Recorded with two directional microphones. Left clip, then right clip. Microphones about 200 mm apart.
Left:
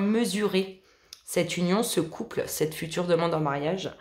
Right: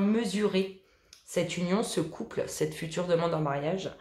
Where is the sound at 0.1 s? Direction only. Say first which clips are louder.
Left 3 dB; 30° left (ahead or behind).